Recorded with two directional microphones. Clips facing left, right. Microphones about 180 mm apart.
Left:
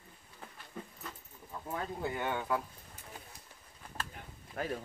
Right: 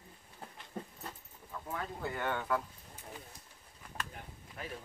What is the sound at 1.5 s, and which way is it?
Speech, 20° left (ahead or behind).